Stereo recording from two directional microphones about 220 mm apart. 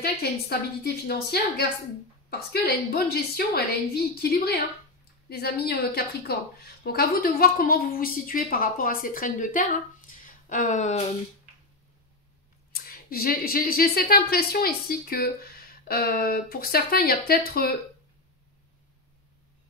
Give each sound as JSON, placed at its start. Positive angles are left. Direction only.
{"t": 0.0, "sound": "a woman's voice", "side_deg": 45}
{"t": 12.7, "sound": "speech", "side_deg": 40}